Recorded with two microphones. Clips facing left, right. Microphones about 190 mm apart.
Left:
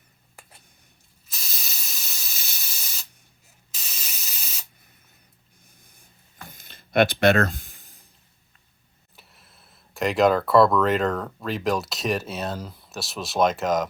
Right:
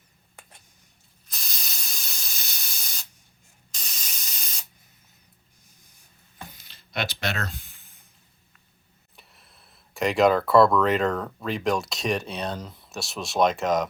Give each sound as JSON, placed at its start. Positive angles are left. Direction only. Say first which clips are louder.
{"t": 1.3, "sound": "spray", "louder": "even", "side_deg": 5}
{"t": 6.5, "sound": "a sound", "louder": "left 13 dB", "side_deg": 50}
{"t": 7.8, "sound": "music", "louder": "left 4 dB", "side_deg": 35}
{"t": 9.1, "sound": "speech", "louder": "left 1 dB", "side_deg": 0}